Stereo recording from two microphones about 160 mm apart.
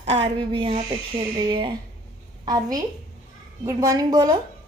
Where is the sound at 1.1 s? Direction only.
30° right (ahead or behind).